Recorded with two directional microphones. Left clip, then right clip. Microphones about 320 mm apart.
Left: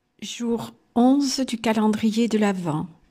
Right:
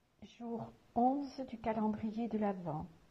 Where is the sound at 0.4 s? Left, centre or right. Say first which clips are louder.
Left 16 dB; left.